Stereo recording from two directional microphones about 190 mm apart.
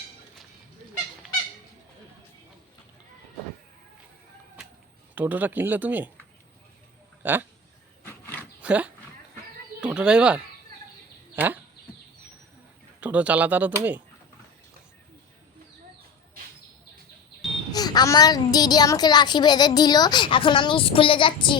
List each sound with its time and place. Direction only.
4.6 s a sound: 5° right (ahead or behind)
5.1 s speech: 10° right (ahead or behind)
7.2 s speech: 10° right (ahead or behind)
8.0 s dog: 10° left (ahead or behind)
8.6 s speech: 5° right (ahead or behind)
13.0 s speech: 5° right (ahead or behind)
17.7 s a child's voice: 20° left (ahead or behind)